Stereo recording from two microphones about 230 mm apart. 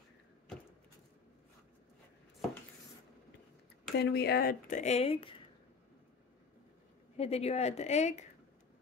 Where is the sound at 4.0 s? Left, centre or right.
Left.